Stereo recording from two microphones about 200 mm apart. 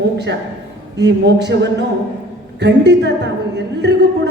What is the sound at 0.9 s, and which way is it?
Speech, 60° right (ahead or behind).